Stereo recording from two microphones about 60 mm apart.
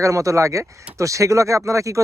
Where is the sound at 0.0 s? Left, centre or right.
Right.